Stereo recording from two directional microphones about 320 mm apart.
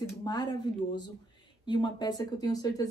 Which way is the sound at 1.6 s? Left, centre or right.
Centre.